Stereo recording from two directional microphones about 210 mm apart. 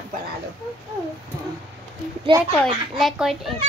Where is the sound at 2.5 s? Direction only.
Centre (ahead or behind).